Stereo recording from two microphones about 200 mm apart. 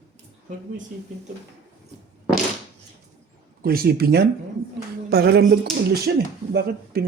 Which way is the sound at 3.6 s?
50° right (ahead or behind).